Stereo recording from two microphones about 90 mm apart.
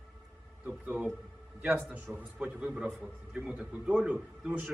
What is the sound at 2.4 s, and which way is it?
A man's voice, 15° right (ahead or behind).